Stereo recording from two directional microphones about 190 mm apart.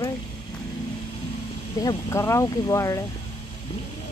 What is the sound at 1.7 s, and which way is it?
Speech, 15° left (ahead or behind).